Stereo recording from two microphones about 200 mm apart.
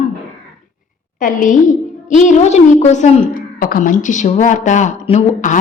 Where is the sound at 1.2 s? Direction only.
40° left (ahead or behind).